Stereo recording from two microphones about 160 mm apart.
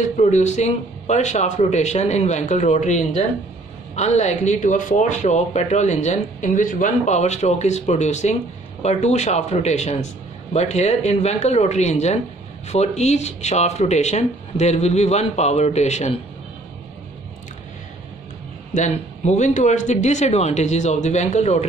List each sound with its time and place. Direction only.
0.2 s speech: 45° left (ahead or behind)
18.7 s speech: 50° left (ahead or behind)